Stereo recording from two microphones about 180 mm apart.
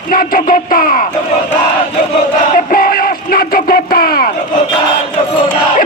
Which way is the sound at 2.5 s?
50° left (ahead or behind).